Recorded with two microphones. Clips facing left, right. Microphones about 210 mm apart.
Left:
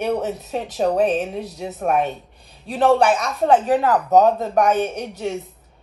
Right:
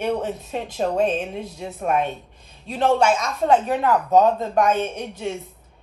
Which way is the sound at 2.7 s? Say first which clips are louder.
Left 3 dB; 35° left (ahead or behind).